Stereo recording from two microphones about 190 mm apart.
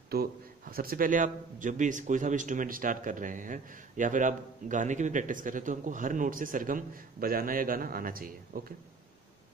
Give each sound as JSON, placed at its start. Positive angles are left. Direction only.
{"t": 0.1, "sound": "a man's voice", "side_deg": -50}